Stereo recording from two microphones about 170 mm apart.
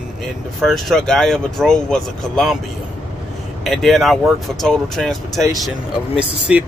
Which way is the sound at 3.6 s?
Centre (ahead or behind).